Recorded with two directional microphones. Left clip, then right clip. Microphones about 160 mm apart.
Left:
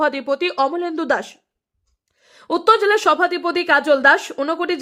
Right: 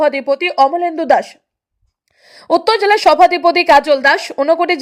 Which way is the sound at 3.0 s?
20° right (ahead or behind).